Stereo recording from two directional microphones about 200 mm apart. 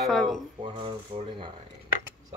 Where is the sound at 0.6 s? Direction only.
25° right (ahead or behind).